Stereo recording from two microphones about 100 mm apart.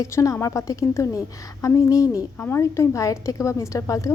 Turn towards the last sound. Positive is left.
turn(degrees=35)  # may be behind; listen again after turning